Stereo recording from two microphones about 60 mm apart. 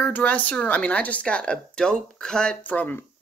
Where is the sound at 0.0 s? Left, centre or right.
Left.